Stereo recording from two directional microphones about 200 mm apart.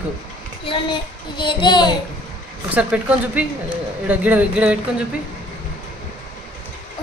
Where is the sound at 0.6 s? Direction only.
25° left (ahead or behind).